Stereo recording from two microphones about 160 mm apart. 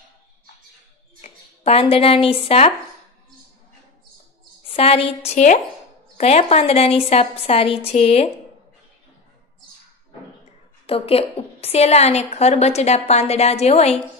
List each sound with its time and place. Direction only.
1.2 s speech: 40° left (ahead or behind)
4.6 s a woman's voice: 35° left (ahead or behind)
10.9 s a woman's voice: 35° left (ahead or behind)